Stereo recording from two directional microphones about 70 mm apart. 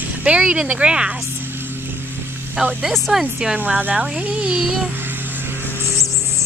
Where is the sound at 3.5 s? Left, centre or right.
Right.